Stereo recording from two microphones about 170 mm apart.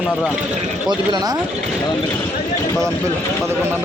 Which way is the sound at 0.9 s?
25° right (ahead or behind).